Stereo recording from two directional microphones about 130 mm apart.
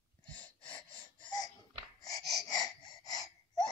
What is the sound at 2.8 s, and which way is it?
Gasp, 30° left (ahead or behind).